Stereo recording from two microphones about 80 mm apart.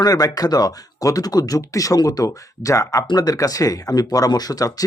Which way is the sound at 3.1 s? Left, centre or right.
Left.